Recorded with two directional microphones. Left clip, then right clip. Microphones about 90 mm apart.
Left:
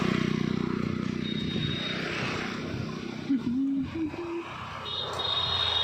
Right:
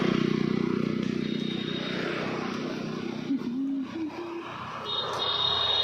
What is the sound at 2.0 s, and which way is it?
Vehicle, centre (ahead or behind).